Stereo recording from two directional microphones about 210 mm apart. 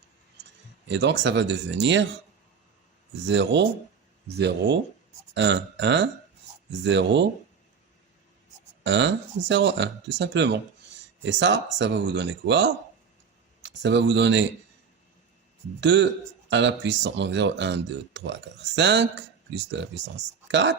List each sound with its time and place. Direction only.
0.9 s speech: 55° right (ahead or behind)
3.2 s speech: 55° right (ahead or behind)
8.8 s speech: 55° right (ahead or behind)
15.8 s speech: 55° right (ahead or behind)